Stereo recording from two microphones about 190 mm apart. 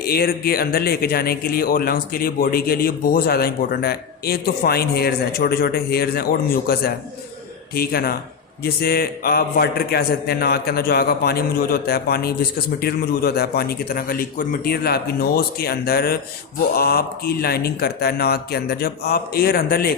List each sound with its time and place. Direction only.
0.0 s a man's voice: 55° left (ahead or behind)